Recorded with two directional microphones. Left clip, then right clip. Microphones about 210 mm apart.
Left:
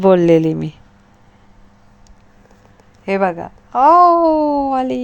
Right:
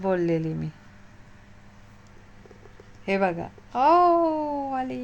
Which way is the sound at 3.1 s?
15° left (ahead or behind).